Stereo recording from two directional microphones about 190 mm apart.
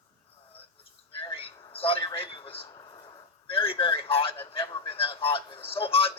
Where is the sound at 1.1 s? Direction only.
30° left (ahead or behind).